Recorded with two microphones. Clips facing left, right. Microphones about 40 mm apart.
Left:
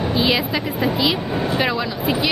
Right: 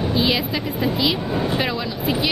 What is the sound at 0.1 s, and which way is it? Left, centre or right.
Speech, centre.